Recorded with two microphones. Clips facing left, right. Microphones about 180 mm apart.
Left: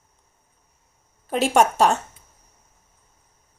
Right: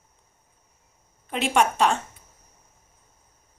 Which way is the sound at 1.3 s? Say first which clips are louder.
Left 4 dB; 40° left (ahead or behind).